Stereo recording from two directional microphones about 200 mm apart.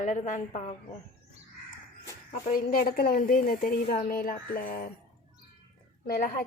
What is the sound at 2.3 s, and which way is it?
Speech, 45° left (ahead or behind).